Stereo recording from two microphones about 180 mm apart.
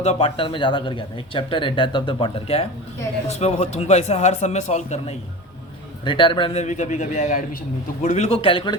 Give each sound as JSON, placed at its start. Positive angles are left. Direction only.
{"t": 0.0, "sound": "speech", "side_deg": 35}
{"t": 6.1, "sound": "speech", "side_deg": 25}